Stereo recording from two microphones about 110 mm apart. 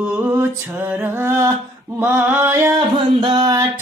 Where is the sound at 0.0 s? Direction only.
15° right (ahead or behind).